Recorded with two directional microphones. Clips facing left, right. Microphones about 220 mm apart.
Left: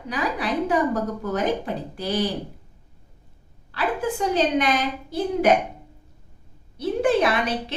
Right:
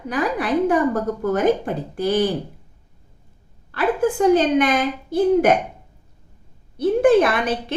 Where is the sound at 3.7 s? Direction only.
50° right (ahead or behind).